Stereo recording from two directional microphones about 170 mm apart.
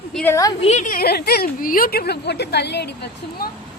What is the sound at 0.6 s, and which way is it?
Speech, 40° left (ahead or behind).